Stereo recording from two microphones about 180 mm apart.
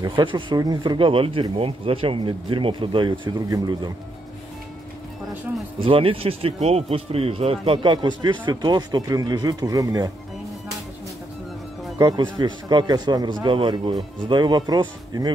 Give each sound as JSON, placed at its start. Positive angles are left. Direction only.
{"t": 0.0, "sound": "speech", "side_deg": -25}
{"t": 5.9, "sound": "speech", "side_deg": -30}
{"t": 12.0, "sound": "speech", "side_deg": -20}